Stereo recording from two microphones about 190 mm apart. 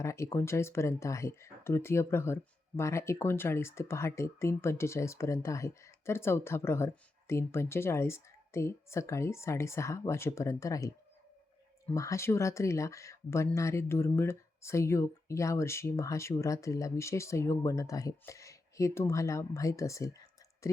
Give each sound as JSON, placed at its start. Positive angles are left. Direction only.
{"t": 0.0, "sound": "speech", "side_deg": 15}
{"t": 11.9, "sound": "speech", "side_deg": 15}